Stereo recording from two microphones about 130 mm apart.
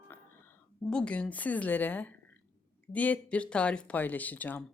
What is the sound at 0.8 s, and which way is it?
Speech, 5° left (ahead or behind).